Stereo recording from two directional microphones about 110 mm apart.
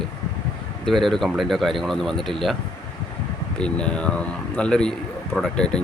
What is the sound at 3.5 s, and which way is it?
Speech, 10° left (ahead or behind).